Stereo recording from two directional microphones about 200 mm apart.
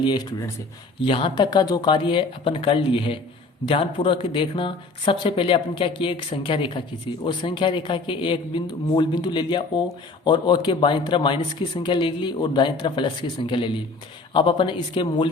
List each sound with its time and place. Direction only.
0.0 s speech: 20° left (ahead or behind)